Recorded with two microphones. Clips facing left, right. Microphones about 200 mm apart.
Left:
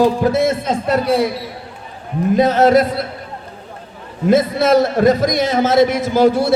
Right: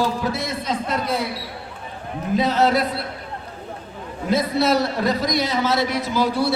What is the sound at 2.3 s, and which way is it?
Speech, 45° left (ahead or behind).